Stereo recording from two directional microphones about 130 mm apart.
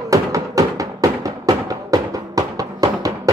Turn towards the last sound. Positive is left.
turn(degrees=-30)  # may be behind; listen again after turning